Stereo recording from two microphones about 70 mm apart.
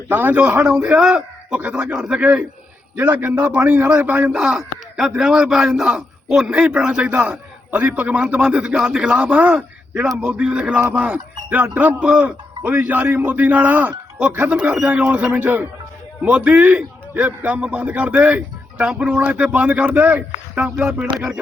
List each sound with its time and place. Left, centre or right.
0.1 s speech: right
0.7 s speech: centre
2.2 s speech: right
4.3 s speech: centre